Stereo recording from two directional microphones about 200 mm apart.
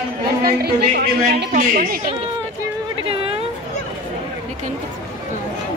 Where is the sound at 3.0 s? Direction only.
25° right (ahead or behind).